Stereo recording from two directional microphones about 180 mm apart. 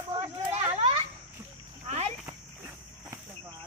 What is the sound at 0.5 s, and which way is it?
Children playing, 30° right (ahead or behind).